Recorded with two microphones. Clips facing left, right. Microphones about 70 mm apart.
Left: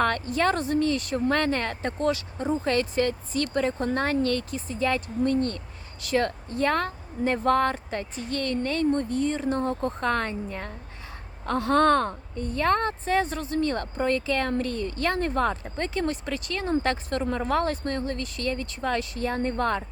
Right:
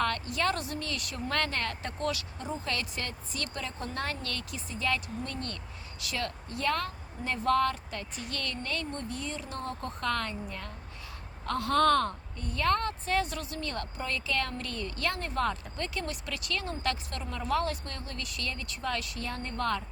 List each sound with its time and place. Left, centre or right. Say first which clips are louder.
0.0 s a woman's voice: left 6 dB; left